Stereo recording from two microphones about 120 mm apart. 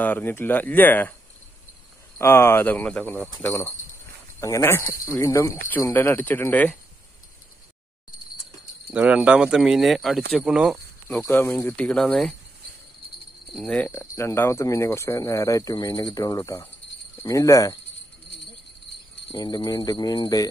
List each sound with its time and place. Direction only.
0.0 s speech: 15° left (ahead or behind)
2.1 s speech: 20° left (ahead or behind)
8.9 s speech: 10° right (ahead or behind)
11.1 s speech: 15° left (ahead or behind)
11.8 s speech: 5° left (ahead or behind)
13.5 s speech: centre (ahead or behind)
13.7 s speech: 20° left (ahead or behind)
19.3 s speech: 40° left (ahead or behind)